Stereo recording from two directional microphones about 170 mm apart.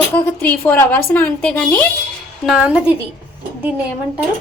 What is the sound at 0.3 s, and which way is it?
A woman's voice, 10° left (ahead or behind).